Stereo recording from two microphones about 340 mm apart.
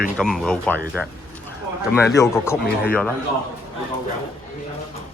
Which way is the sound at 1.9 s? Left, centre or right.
Centre.